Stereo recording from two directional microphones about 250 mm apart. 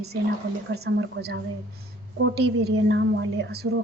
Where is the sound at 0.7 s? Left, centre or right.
Right.